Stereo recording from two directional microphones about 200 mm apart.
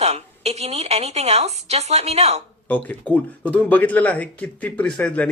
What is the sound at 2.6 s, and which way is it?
Speech, 10° left (ahead or behind).